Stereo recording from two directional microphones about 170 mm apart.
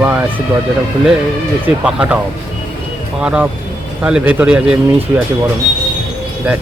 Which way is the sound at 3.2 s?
5° right (ahead or behind).